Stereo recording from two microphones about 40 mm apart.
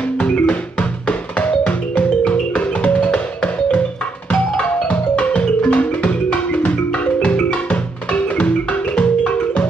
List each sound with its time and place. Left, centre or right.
0.2 s music: left
4.3 s music: left
7.2 s music: left